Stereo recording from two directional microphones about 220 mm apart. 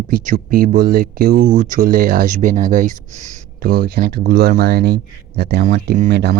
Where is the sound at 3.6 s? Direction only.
45° right (ahead or behind).